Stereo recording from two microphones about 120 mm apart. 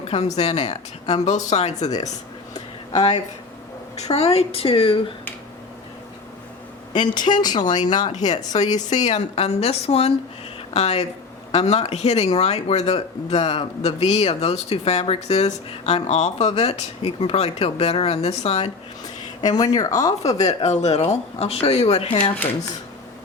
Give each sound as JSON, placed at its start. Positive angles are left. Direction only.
{"t": 0.0, "sound": "speech", "side_deg": 60}
{"t": 3.9, "sound": "a woman's voice", "side_deg": 65}
{"t": 6.9, "sound": "speech", "side_deg": 40}
{"t": 8.1, "sound": "speech", "side_deg": 75}
{"t": 19.0, "sound": "speech", "side_deg": 35}
{"t": 20.4, "sound": "speech", "side_deg": 70}